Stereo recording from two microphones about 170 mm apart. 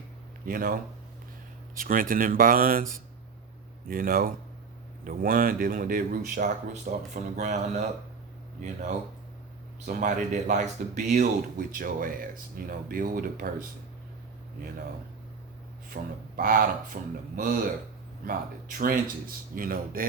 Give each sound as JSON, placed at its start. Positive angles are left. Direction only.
{"t": 0.4, "sound": "speech", "side_deg": -55}
{"t": 1.8, "sound": "speech", "side_deg": -55}
{"t": 3.8, "sound": "speech", "side_deg": -55}
{"t": 15.9, "sound": "speech", "side_deg": -55}